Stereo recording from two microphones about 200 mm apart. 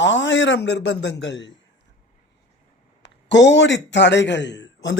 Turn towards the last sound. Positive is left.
turn(degrees=60)  # may be behind; listen again after turning